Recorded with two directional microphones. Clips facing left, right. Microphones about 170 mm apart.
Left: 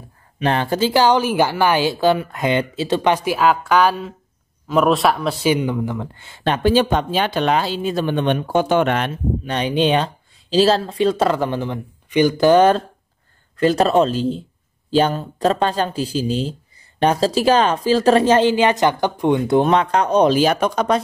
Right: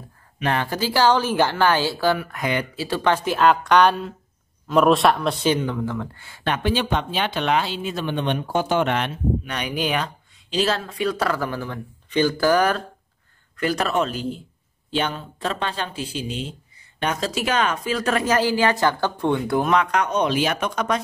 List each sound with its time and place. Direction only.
0.4 s a woman's voice: 25° left (ahead or behind); by 9.5 s 45° left (ahead or behind)
9.5 s speech: 30° left (ahead or behind)